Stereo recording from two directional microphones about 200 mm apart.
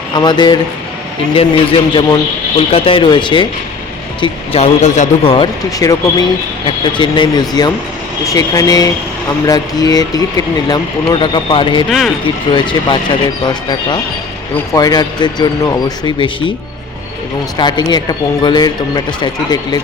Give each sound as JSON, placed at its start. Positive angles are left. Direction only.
{"t": 0.1, "sound": "speech", "side_deg": 20}
{"t": 11.9, "sound": "speech", "side_deg": 0}
{"t": 12.2, "sound": "speech", "side_deg": 25}
{"t": 17.6, "sound": "speech", "side_deg": 20}